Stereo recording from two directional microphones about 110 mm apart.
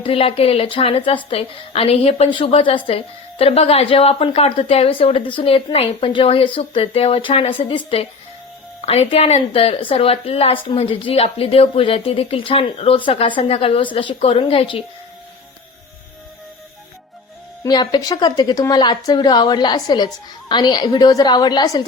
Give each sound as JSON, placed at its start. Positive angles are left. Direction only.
{"t": 0.0, "sound": "a woman's voice", "side_deg": 55}
{"t": 8.8, "sound": "a woman's voice", "side_deg": 65}
{"t": 17.6, "sound": "a woman's voice", "side_deg": 40}